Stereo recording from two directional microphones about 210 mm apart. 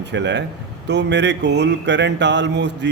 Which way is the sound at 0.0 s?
55° right (ahead or behind).